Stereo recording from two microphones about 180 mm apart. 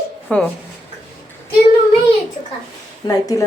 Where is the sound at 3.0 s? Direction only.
20° left (ahead or behind).